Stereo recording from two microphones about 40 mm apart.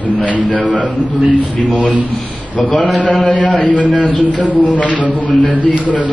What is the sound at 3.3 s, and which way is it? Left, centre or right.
A man's voice, left.